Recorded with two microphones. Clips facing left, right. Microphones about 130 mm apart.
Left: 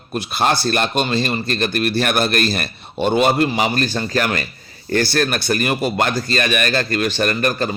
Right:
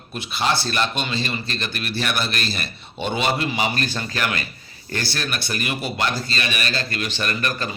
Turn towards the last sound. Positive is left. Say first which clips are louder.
# left 7 dB
turn(degrees=45)  # may be behind; listen again after turning